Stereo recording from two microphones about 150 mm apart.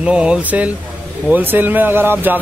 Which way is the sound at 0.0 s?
5° right (ahead or behind).